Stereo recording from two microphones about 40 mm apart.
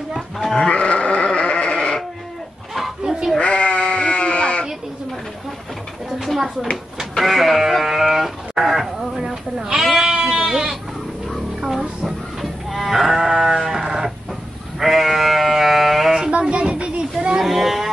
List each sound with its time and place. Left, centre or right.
0.6 s sheep: left
1.8 s sheep: centre
3.3 s sheep: left
6.1 s a sound: centre
7.2 s sheep: centre
9.9 s goat: centre
12.4 s livestock: centre
13.4 s sheep: centre
16.1 s sheep: centre
16.3 s a sound: right
17.4 s cattle: centre